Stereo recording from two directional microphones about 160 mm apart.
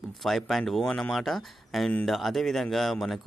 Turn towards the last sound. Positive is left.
turn(degrees=0)  # may be behind; listen again after turning